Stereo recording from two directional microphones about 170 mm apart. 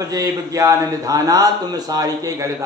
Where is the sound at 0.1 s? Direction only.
20° right (ahead or behind).